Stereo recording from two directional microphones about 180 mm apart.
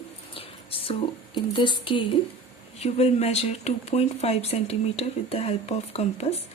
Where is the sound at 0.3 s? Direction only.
30° left (ahead or behind).